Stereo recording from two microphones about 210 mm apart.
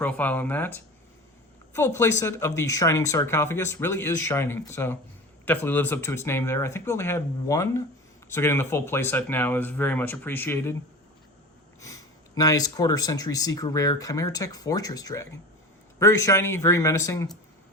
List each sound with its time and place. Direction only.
0.0 s speech: 5° left (ahead or behind)
11.8 s speech: 15° left (ahead or behind)